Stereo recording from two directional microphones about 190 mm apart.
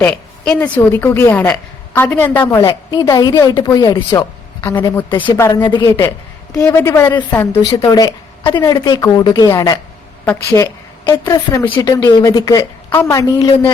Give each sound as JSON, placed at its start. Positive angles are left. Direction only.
{"t": 0.0, "sound": "a woman's voice", "side_deg": 10}
{"t": 5.0, "sound": "a woman's voice", "side_deg": 25}
{"t": 5.4, "sound": "a woman's voice", "side_deg": 15}